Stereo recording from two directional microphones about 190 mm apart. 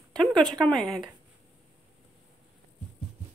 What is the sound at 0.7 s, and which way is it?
Speech, centre (ahead or behind).